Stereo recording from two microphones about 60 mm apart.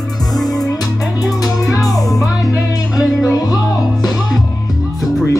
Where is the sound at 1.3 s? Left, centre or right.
Left.